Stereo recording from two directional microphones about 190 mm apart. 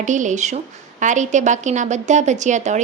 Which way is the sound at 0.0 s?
40° right (ahead or behind).